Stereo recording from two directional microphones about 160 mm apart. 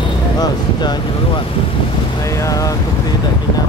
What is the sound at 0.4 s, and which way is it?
Speech, 25° left (ahead or behind).